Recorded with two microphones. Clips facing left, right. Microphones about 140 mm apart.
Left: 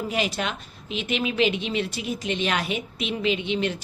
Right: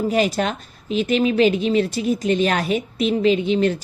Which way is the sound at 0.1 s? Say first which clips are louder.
Right 7 dB; 40° right (ahead or behind).